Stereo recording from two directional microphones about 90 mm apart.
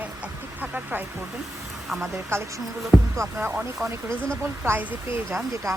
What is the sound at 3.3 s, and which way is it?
Speech, 15° right (ahead or behind).